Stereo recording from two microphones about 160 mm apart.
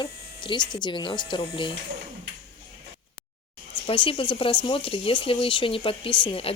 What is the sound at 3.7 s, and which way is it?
Speech, 35° left (ahead or behind).